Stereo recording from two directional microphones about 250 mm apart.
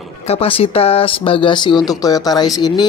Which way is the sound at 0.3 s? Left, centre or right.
Left.